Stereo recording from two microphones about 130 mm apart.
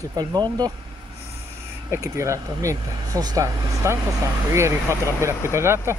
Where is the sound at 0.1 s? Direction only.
30° right (ahead or behind).